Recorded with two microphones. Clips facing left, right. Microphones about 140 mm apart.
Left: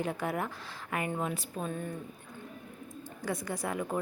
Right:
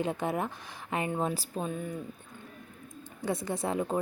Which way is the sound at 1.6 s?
10° right (ahead or behind).